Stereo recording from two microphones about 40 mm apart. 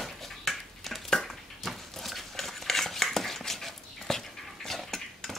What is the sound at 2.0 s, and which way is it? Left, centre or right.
Dog, centre.